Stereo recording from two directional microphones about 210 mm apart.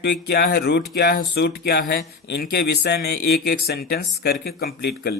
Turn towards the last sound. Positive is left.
turn(degrees=50)  # may be behind; listen again after turning